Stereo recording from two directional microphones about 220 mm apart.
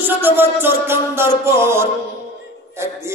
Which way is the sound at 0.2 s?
10° right (ahead or behind).